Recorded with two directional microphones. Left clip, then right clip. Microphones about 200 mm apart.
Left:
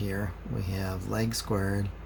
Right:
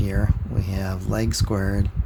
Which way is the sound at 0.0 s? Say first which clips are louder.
Right 6 dB; 45° right (ahead or behind).